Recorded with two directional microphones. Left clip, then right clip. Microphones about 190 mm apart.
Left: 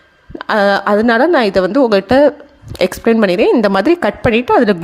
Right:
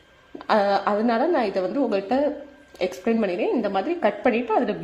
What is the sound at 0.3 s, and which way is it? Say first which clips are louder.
Speech: left 8 dB; 40° left (ahead or behind).